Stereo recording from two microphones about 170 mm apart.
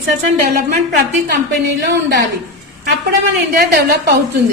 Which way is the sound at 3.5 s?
65° right (ahead or behind).